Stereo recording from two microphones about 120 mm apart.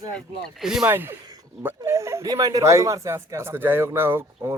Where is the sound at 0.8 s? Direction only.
20° right (ahead or behind).